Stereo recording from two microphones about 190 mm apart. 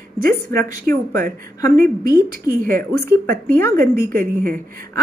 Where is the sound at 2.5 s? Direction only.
45° right (ahead or behind).